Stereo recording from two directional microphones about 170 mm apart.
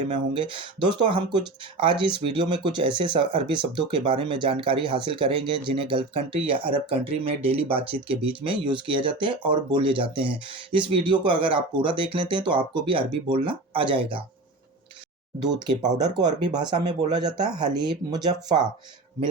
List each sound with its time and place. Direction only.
0.3 s speech: 30° right (ahead or behind)
16.0 s speech: 25° right (ahead or behind)